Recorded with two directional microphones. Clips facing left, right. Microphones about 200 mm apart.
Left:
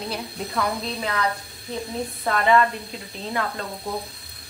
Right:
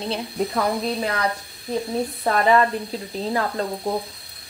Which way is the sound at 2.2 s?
35° right (ahead or behind).